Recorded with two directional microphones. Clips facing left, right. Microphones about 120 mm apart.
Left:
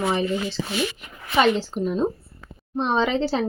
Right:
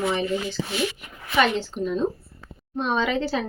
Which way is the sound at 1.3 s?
35° left (ahead or behind).